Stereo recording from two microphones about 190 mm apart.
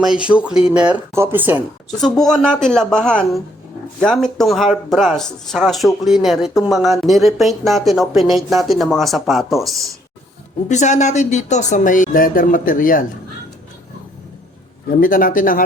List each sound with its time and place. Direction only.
0.0 s speech: 5° right (ahead or behind)
2.0 s speech: centre (ahead or behind)
10.7 s speech: 40° left (ahead or behind)
15.0 s speech: 45° left (ahead or behind)